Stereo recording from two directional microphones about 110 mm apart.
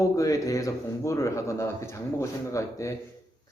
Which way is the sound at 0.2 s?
30° left (ahead or behind).